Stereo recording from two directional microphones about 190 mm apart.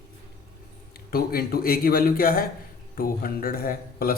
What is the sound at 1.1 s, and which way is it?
Speech, 55° left (ahead or behind).